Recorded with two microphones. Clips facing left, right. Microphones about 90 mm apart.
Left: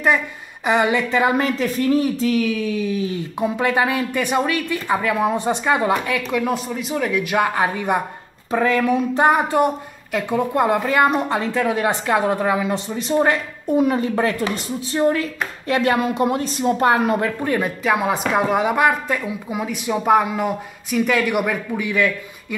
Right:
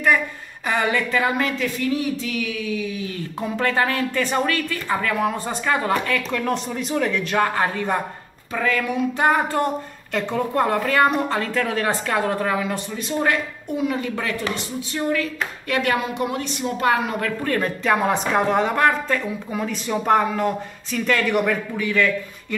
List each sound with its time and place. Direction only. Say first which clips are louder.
0.7 s speech: left 4 dB; 20° left (ahead or behind)
1.4 s speech: left 3 dB; 35° left (ahead or behind)
3.1 s speech: left 5 dB; 15° left (ahead or behind)
8.5 s speech: left 5 dB; 30° left (ahead or behind)
9.2 s speech: left 3 dB; 15° left (ahead or behind)
17.2 s speech: left 3 dB; 15° left (ahead or behind)
17.6 s speech: right 1 dB; 5° left (ahead or behind)